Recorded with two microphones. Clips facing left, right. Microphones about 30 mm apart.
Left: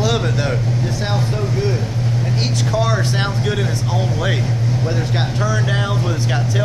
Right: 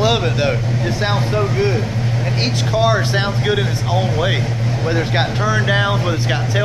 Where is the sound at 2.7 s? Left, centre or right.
Centre.